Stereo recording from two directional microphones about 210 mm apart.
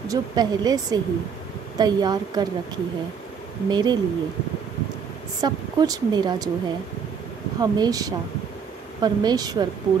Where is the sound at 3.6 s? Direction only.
20° right (ahead or behind).